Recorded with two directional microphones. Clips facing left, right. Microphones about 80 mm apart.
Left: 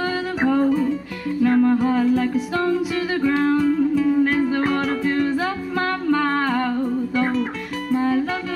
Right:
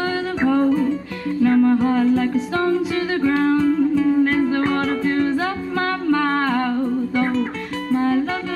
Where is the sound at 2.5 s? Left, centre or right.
Right.